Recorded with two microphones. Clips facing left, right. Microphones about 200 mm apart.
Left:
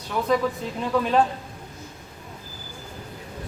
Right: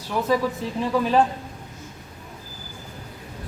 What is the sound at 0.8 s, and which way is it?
Speech, 5° right (ahead or behind).